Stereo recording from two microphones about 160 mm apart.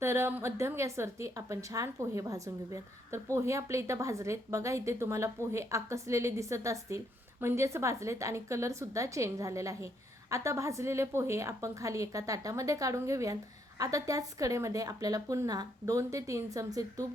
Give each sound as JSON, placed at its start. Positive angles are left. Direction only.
{"t": 0.0, "sound": "a woman's voice", "side_deg": -15}